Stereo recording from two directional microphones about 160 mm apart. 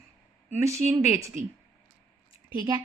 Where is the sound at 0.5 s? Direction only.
20° right (ahead or behind).